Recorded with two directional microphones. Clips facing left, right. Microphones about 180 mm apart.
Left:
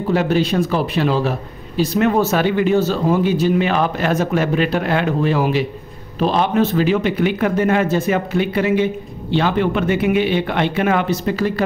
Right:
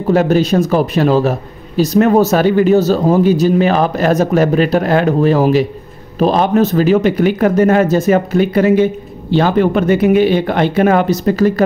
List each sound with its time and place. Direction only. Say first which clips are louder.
0.1 s a man's voice: right 6 dB; 45° right (ahead or behind)